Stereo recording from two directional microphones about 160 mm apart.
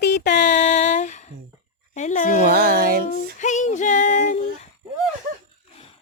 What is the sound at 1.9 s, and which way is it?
Speech, 50° left (ahead or behind).